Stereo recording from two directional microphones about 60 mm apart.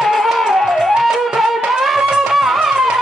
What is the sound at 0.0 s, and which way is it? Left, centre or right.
Music, centre.